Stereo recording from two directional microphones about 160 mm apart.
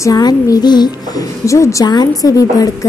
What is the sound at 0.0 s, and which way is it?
A woman's voice, 25° left (ahead or behind).